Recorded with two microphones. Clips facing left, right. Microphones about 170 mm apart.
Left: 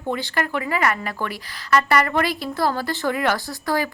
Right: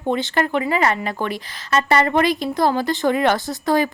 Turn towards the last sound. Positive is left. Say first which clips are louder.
# right 5 dB
turn(degrees=-20)  # may be behind; listen again after turning